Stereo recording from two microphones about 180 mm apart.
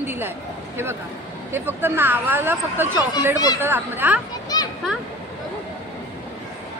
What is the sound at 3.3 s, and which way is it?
Speech, 20° left (ahead or behind).